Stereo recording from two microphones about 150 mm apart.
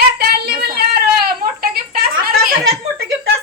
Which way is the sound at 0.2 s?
90° right.